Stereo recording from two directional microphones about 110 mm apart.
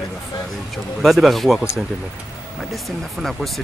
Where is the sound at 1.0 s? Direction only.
Centre (ahead or behind).